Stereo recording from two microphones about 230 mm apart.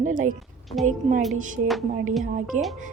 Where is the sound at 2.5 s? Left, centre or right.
Right.